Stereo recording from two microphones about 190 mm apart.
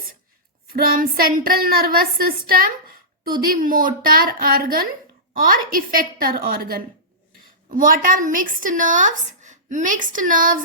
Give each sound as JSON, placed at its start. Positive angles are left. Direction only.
{"t": 0.7, "sound": "a woman's voice", "side_deg": -50}